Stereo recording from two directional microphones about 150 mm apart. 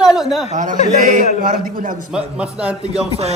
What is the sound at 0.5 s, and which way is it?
A man's voice, 55° right (ahead or behind).